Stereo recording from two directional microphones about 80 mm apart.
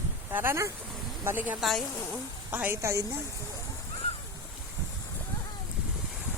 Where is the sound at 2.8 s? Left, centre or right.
Right.